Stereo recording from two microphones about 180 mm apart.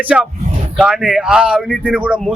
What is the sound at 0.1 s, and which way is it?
Speech, 5° right (ahead or behind).